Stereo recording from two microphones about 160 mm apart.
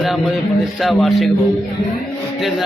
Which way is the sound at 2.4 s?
Centre (ahead or behind).